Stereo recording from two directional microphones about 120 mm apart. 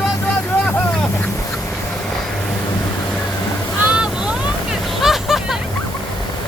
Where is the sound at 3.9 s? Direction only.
5° right (ahead or behind).